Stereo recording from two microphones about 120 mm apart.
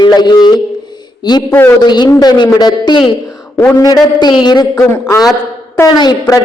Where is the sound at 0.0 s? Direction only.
35° left (ahead or behind).